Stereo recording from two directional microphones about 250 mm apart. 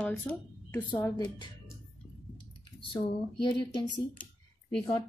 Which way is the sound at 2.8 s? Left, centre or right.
Centre.